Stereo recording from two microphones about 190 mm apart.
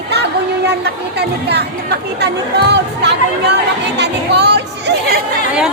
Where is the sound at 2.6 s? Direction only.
65° right (ahead or behind).